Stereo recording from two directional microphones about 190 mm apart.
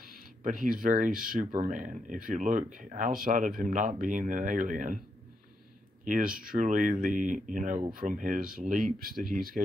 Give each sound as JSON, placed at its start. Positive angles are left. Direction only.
{"t": 0.4, "sound": "speech", "side_deg": -45}
{"t": 6.0, "sound": "speech", "side_deg": -45}